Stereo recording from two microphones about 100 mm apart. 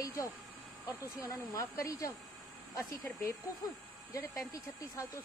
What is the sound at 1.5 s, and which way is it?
Speech, 35° left (ahead or behind).